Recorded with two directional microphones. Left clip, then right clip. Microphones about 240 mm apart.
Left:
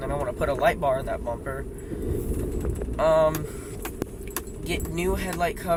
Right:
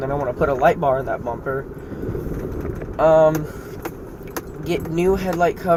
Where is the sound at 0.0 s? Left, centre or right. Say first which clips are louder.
Right 6 dB; left.